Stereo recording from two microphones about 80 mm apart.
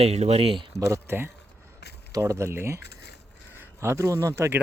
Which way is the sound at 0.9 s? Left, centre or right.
Right.